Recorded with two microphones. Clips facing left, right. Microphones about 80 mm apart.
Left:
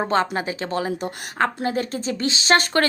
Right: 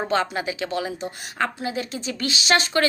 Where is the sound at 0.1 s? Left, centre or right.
Left.